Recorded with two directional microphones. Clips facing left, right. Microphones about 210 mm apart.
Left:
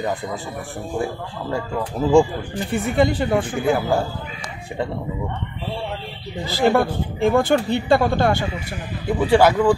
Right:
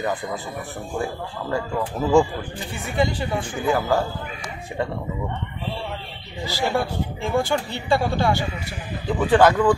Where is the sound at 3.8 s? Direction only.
10° left (ahead or behind).